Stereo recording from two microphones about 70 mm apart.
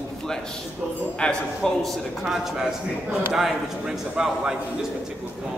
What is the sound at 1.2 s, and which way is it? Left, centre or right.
A man's voice, centre.